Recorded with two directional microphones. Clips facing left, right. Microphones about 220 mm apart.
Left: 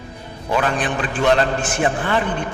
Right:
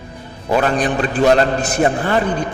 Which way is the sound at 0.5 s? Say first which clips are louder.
Right 4 dB; 40° right (ahead or behind).